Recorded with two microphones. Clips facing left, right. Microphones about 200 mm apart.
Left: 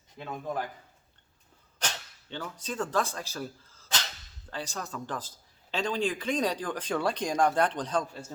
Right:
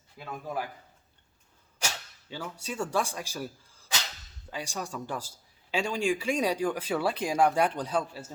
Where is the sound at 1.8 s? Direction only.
10° right (ahead or behind).